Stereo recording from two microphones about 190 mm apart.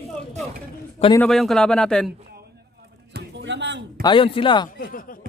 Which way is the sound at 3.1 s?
65° right (ahead or behind).